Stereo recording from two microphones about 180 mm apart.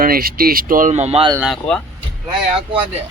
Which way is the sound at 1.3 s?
5° right (ahead or behind).